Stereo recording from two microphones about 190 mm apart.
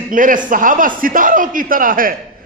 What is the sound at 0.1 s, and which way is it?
A man's voice, 45° right (ahead or behind).